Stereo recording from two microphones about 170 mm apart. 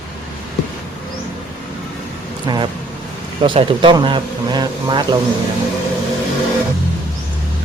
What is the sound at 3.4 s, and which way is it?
Speech, 30° right (ahead or behind).